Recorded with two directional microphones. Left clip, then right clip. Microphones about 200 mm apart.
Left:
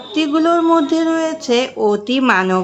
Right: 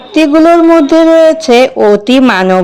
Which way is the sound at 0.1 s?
30° right (ahead or behind).